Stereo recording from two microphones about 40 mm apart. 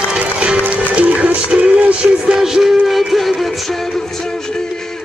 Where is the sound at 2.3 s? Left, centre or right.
Centre.